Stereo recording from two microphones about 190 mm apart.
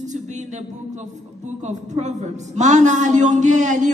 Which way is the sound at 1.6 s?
40° right (ahead or behind).